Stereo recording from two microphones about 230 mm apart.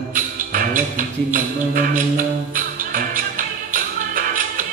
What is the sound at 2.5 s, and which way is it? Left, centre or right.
Music, right.